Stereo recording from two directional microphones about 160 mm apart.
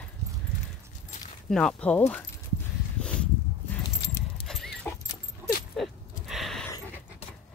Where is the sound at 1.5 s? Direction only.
5° left (ahead or behind).